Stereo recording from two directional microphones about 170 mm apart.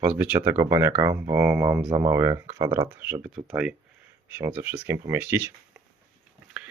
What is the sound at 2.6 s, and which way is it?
Speech, 30° right (ahead or behind).